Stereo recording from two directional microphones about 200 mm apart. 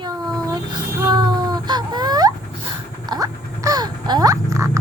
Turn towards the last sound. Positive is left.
turn(degrees=-15)  # may be behind; listen again after turning